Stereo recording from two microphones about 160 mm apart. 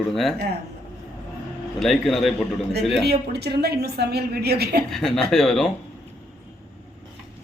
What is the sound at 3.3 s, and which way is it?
A woman's voice, 90° right.